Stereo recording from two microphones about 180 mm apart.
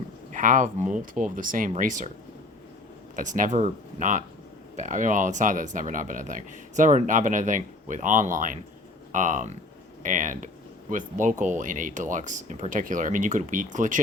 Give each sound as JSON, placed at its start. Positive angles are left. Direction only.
{"t": 0.3, "sound": "speech", "side_deg": -45}
{"t": 3.2, "sound": "speech", "side_deg": -45}